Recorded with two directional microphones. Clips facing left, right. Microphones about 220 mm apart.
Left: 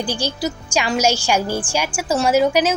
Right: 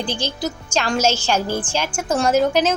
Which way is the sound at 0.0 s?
10° left (ahead or behind).